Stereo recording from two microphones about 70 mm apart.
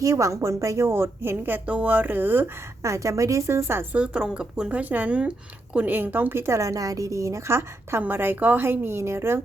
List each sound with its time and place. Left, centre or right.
0.0 s a woman's voice: right
2.8 s a woman's voice: right
3.9 s speech: centre; by 6.6 s right
6.6 s a woman's voice: right
8.0 s a woman's voice: right